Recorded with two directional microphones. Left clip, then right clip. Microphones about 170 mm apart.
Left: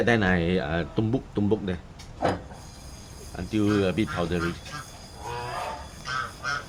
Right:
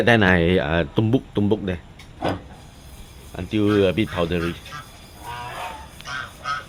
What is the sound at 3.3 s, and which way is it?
Speech, 50° right (ahead or behind).